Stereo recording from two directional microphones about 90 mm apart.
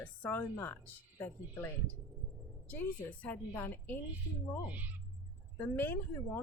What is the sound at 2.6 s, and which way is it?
Speech, 20° left (ahead or behind).